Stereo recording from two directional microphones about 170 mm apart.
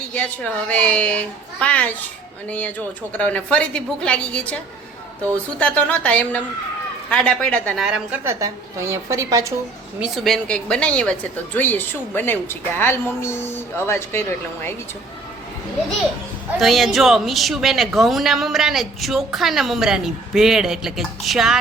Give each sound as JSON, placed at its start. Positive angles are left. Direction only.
{"t": 0.1, "sound": "a woman's voice", "side_deg": 10}
{"t": 7.9, "sound": "speech", "side_deg": -5}
{"t": 8.2, "sound": "a woman's voice", "side_deg": -20}
{"t": 10.0, "sound": "a woman's voice", "side_deg": 0}
{"t": 16.6, "sound": "speech", "side_deg": 0}